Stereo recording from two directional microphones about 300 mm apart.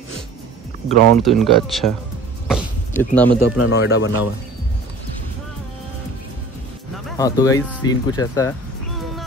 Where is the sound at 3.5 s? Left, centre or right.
Left.